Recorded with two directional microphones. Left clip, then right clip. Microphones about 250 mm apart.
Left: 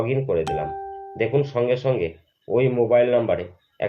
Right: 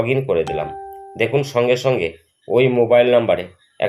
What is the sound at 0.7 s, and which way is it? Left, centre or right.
Doorbell, centre.